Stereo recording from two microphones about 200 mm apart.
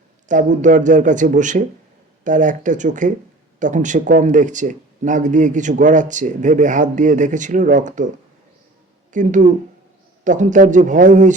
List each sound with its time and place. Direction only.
0.3 s speech: 40° right (ahead or behind)
9.1 s speech: 40° right (ahead or behind)